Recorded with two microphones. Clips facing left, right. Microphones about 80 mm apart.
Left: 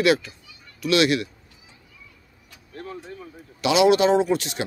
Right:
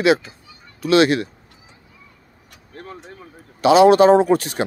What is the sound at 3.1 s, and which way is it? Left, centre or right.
Speech, right.